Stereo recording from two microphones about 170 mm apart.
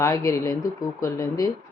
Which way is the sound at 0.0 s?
20° left (ahead or behind).